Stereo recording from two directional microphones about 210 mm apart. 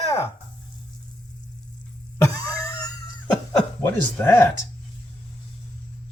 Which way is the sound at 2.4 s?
15° left (ahead or behind).